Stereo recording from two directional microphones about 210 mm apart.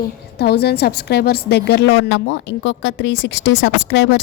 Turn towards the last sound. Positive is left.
turn(degrees=60)  # may be behind; listen again after turning